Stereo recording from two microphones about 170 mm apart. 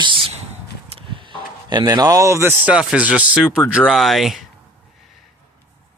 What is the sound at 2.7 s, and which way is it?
Speech, 5° right (ahead or behind).